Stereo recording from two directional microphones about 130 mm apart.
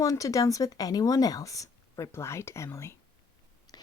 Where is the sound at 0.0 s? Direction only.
25° left (ahead or behind).